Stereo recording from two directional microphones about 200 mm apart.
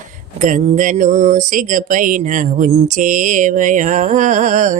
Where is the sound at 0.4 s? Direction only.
40° right (ahead or behind).